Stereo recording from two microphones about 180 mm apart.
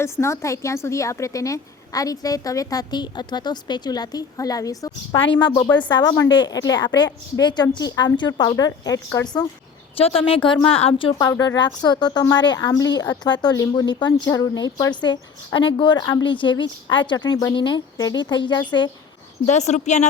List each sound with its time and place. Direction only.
0.0 s speech: 15° left (ahead or behind)
10.0 s a woman's voice: 30° left (ahead or behind)
19.5 s a woman's voice: 40° left (ahead or behind)